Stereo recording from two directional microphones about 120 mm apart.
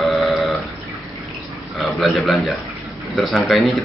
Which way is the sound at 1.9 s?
Centre (ahead or behind).